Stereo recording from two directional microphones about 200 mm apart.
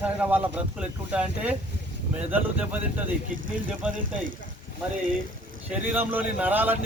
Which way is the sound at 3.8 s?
5° right (ahead or behind).